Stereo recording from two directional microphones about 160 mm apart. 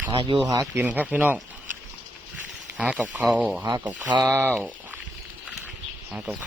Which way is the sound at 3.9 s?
25° right (ahead or behind).